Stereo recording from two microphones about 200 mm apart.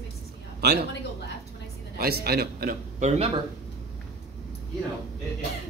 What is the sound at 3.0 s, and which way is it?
Speech, 35° right (ahead or behind).